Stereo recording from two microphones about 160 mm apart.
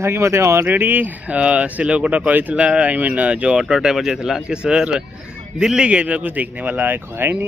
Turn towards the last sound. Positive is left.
turn(degrees=-15)  # may be behind; listen again after turning